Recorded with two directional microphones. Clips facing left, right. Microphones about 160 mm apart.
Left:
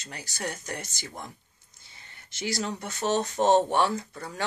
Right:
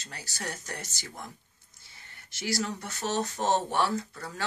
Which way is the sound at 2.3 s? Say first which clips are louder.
Left 1 dB; 20° left (ahead or behind).